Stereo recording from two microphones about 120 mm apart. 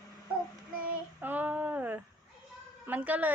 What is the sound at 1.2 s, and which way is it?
A woman's voice, 15° right (ahead or behind).